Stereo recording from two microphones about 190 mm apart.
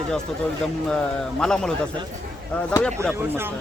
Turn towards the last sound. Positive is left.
turn(degrees=5)  # may be behind; listen again after turning